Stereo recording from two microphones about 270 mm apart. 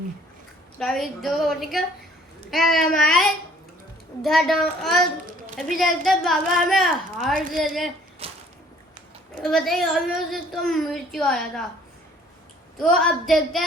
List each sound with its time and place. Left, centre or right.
0.8 s speech: centre
8.2 s a sound: right
9.3 s speech: centre
12.7 s speech: centre